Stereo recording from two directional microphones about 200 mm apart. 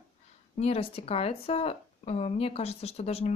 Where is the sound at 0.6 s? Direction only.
30° left (ahead or behind).